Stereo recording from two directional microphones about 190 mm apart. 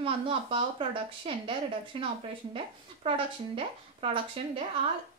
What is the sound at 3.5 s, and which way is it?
Speech, 30° right (ahead or behind).